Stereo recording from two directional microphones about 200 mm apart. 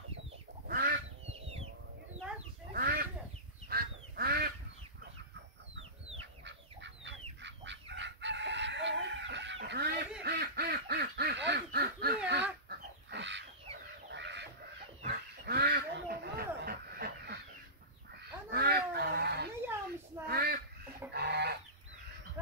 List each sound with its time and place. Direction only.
0.7 s duck: 50° right (ahead or behind)
1.3 s chicken: 30° right (ahead or behind)
2.7 s a sound: 45° right (ahead or behind)
3.6 s goose: 50° right (ahead or behind)
6.4 s chicken: 65° right (ahead or behind)
10.2 s quack: 55° right (ahead or behind)
12.3 s a sound: 60° right (ahead or behind)
14.1 s chicken: 60° right (ahead or behind)
15.0 s duck: 50° right (ahead or behind)
18.5 s a sound: 50° right (ahead or behind)
21.1 s fowl: 55° right (ahead or behind)